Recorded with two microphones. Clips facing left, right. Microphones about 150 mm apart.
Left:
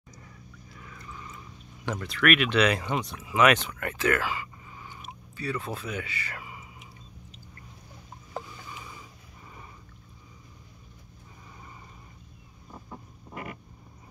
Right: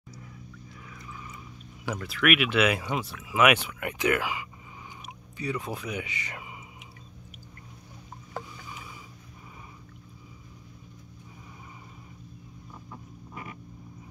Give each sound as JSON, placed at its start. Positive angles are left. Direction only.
{"t": 0.8, "sound": "a sound", "side_deg": -5}
{"t": 1.9, "sound": "speech", "side_deg": -5}
{"t": 13.3, "sound": "vehicle", "side_deg": 55}